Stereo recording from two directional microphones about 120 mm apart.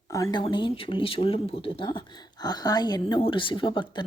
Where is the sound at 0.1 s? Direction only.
30° left (ahead or behind).